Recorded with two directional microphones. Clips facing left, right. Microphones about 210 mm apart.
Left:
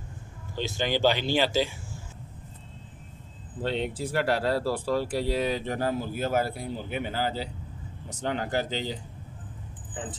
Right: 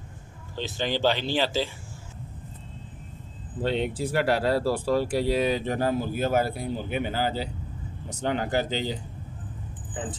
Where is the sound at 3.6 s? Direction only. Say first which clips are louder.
Right 3 dB; 10° right (ahead or behind).